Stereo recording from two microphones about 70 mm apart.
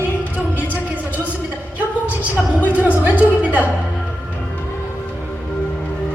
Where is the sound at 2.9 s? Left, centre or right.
Right.